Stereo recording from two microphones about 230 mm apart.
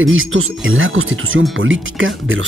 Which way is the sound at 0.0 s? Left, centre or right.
Right.